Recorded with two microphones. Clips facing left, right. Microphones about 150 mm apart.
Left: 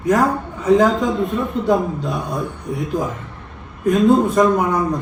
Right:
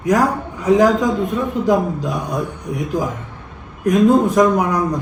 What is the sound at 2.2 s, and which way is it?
Speech, 20° right (ahead or behind).